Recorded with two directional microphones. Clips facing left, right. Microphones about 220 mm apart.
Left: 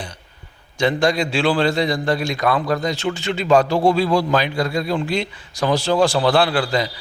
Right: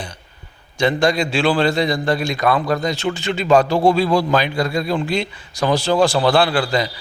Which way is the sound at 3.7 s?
35° right (ahead or behind).